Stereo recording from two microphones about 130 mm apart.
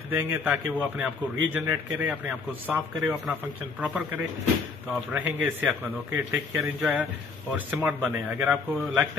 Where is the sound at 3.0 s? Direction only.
5° right (ahead or behind).